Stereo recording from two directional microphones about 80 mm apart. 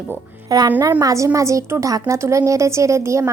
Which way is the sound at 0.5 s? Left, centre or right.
Right.